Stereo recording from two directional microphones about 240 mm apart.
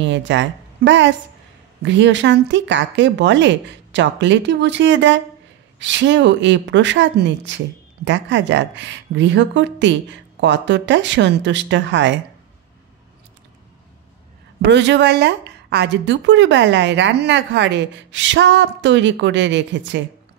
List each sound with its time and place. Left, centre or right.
0.0 s a woman's voice: right
14.6 s a woman's voice: right